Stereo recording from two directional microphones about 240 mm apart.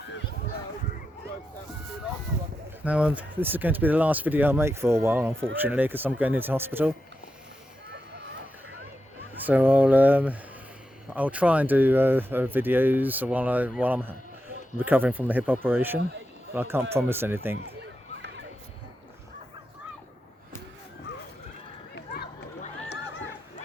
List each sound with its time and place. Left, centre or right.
2.8 s speech: centre
9.3 s speech: centre
21.9 s run: left